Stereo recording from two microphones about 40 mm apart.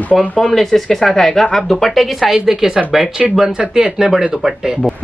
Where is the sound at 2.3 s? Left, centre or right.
Centre.